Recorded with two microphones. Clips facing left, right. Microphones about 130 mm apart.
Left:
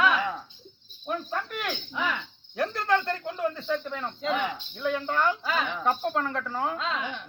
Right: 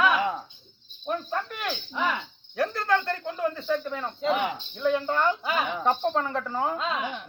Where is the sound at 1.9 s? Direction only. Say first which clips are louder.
Right 4 dB; 15° right (ahead or behind).